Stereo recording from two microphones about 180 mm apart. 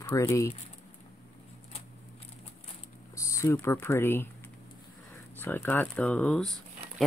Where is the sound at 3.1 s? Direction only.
15° left (ahead or behind).